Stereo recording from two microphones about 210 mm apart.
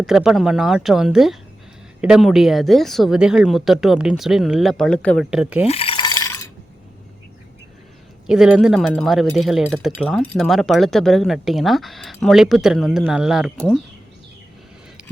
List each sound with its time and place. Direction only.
0.0 s speech: centre (ahead or behind)
5.6 s a sound: 30° left (ahead or behind)
8.3 s speech: 5° right (ahead or behind)